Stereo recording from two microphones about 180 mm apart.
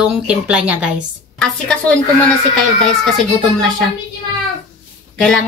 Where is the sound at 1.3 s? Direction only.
5° left (ahead or behind).